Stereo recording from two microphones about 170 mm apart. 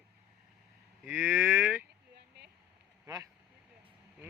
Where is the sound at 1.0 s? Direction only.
10° right (ahead or behind).